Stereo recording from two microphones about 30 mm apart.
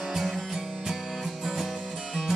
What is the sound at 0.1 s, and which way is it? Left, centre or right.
Music, centre.